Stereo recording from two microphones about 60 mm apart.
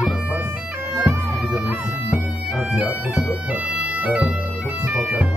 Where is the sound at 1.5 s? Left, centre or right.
Right.